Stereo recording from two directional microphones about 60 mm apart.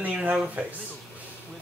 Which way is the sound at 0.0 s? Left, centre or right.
Right.